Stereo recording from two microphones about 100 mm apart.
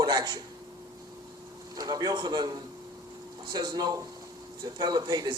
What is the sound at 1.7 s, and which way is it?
A man's voice, 40° right (ahead or behind).